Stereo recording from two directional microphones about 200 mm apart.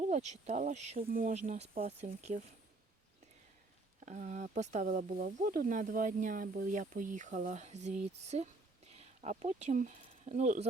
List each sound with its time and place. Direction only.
0.0 s speech: 35° right (ahead or behind)
4.0 s speech: 35° right (ahead or behind)